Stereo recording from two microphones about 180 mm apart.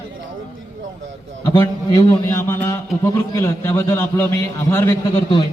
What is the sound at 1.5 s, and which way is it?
A man's voice, 20° left (ahead or behind).